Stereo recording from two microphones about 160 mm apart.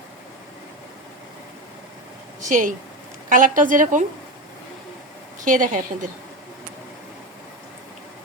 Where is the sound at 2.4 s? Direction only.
55° right (ahead or behind).